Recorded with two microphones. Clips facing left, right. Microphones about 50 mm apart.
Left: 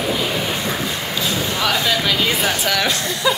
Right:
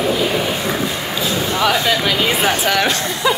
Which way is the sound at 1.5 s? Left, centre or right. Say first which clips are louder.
Right 4 dB; centre.